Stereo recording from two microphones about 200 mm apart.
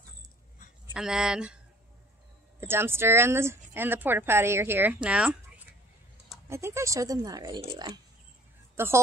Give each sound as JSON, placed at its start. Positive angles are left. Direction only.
{"t": 0.9, "sound": "speech", "side_deg": -5}
{"t": 2.6, "sound": "speech", "side_deg": -10}
{"t": 8.7, "sound": "speech", "side_deg": -10}